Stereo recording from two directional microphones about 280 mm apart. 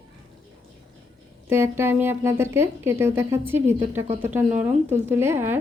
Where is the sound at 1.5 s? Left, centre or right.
Centre.